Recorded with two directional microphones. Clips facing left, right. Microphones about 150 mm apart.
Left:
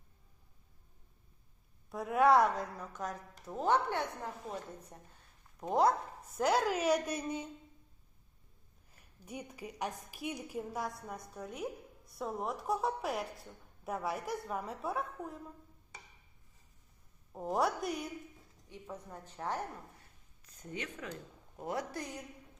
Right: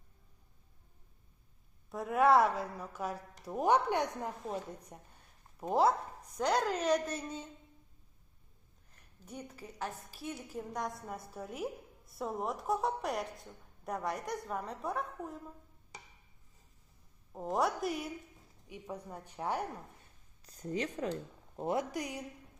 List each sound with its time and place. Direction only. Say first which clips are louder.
1.9 s a woman's voice: even; centre (ahead or behind); by 5.1 s 15° right (ahead or behind)
5.5 s a woman's voice: even; centre (ahead or behind)
8.9 s a woman's voice: left 2 dB; 10° left (ahead or behind)
17.3 s a woman's voice: even; centre (ahead or behind)
18.7 s a woman's voice: right 3 dB; 10° right (ahead or behind)
20.4 s speech: right 7 dB; 35° right (ahead or behind)
21.9 s a woman's voice: right 3 dB; 15° right (ahead or behind)